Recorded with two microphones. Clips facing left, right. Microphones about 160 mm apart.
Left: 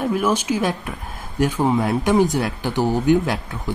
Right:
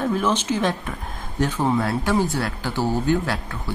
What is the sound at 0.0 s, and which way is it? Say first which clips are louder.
Speech: left 2 dB; 10° left (ahead or behind).